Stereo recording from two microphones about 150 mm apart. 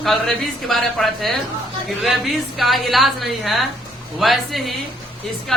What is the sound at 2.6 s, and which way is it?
Speech, centre (ahead or behind).